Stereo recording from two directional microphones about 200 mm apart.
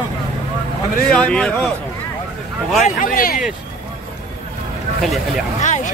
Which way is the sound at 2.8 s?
45° left (ahead or behind).